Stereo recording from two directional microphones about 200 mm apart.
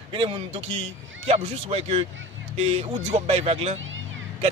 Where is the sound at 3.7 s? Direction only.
75° right (ahead or behind).